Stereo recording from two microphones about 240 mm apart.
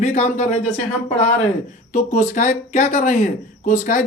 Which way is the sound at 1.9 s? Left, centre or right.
Left.